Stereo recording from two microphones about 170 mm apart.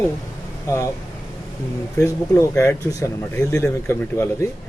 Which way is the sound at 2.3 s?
15° left (ahead or behind).